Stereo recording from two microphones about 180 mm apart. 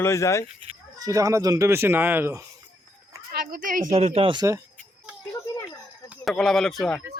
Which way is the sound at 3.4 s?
50° right (ahead or behind).